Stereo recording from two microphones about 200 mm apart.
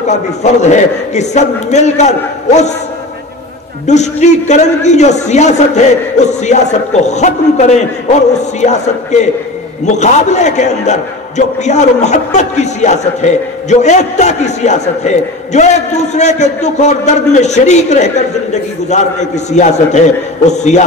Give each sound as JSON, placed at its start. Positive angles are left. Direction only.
{"t": 0.0, "sound": "a man's voice", "side_deg": 35}
{"t": 3.8, "sound": "a man's voice", "side_deg": 35}